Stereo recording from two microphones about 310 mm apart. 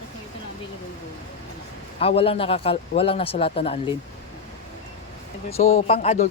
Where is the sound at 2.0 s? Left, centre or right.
Centre.